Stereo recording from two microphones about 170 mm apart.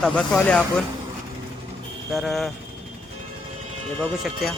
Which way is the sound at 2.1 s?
Centre (ahead or behind).